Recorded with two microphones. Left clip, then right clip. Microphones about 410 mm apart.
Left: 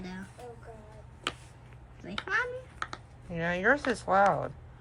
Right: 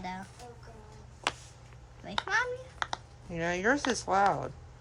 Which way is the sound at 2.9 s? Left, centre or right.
Centre.